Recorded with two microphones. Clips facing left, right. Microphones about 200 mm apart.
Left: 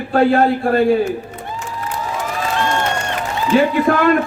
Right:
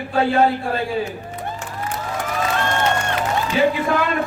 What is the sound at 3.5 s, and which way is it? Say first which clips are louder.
Speech: left 6 dB; 55° left (ahead or behind).